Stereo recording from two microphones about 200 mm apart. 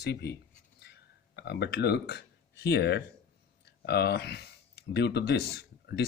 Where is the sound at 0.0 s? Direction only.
55° left (ahead or behind).